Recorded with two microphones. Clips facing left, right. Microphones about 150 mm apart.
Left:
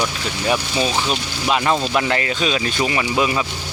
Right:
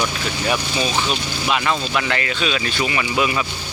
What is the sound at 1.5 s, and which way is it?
Speech, 35° left (ahead or behind).